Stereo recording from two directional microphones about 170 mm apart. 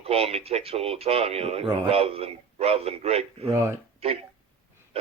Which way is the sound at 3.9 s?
35° right (ahead or behind).